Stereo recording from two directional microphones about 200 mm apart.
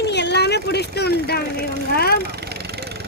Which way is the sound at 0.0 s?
60° left (ahead or behind).